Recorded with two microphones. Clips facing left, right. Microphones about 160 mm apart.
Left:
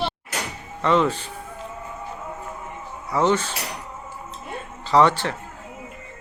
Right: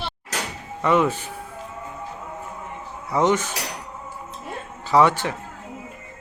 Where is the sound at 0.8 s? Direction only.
10° right (ahead or behind).